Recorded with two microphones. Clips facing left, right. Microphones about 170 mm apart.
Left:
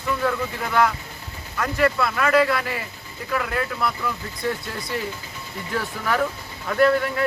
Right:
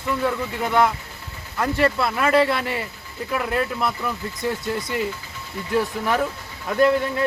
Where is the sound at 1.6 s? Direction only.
30° right (ahead or behind).